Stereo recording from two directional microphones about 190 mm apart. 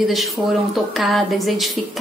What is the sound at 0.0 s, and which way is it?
A woman's voice, centre (ahead or behind).